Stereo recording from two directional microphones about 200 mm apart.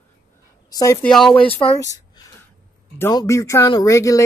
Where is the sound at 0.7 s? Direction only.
20° left (ahead or behind).